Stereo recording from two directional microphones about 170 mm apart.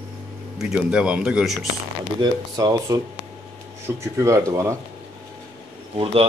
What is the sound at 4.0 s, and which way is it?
Speech, 15° right (ahead or behind).